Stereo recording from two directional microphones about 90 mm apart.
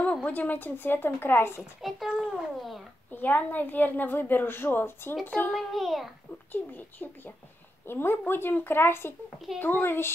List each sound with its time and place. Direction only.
0.0 s a woman's voice: 15° left (ahead or behind)
1.8 s a child's voice: centre (ahead or behind)
3.1 s a woman's voice: 20° left (ahead or behind)
5.5 s a child's voice: centre (ahead or behind)
6.5 s a woman's voice: 20° left (ahead or behind)